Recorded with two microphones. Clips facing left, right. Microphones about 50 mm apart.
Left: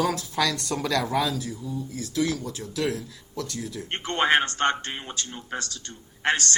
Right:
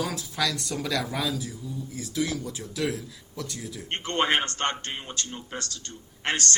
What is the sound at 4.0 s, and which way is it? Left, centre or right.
Speech, left.